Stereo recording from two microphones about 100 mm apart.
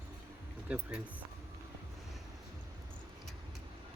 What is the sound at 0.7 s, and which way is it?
Speech, 10° right (ahead or behind).